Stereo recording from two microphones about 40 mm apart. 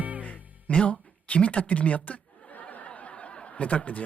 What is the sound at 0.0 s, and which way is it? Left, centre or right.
Music, right.